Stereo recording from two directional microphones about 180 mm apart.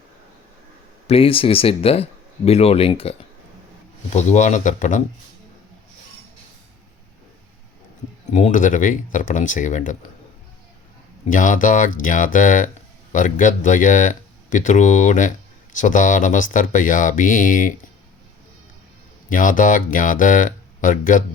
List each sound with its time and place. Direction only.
1.0 s speech: 30° left (ahead or behind)
8.3 s speech: 40° left (ahead or behind)
11.3 s speech: 45° left (ahead or behind)
19.3 s speech: 45° left (ahead or behind)